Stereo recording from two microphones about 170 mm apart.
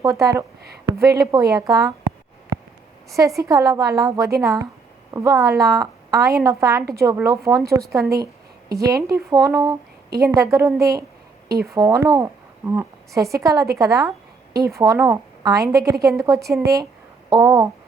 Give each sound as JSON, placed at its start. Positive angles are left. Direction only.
{"t": 0.0, "sound": "a woman's voice", "side_deg": -20}
{"t": 0.6, "sound": "a sound", "side_deg": -70}
{"t": 1.0, "sound": "a woman's voice", "side_deg": -20}
{"t": 3.1, "sound": "a woman's voice", "side_deg": -20}